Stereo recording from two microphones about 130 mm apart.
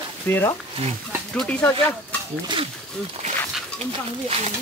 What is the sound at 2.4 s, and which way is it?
Speech, 40° right (ahead or behind).